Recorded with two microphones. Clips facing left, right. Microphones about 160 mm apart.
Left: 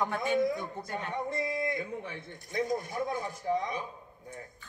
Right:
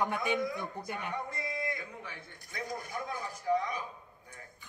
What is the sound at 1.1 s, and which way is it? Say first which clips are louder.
A man's voice: left 5 dB; 25° left (ahead or behind).